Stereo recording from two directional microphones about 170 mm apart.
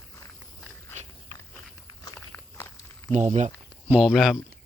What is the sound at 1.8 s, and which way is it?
Walk, 20° left (ahead or behind).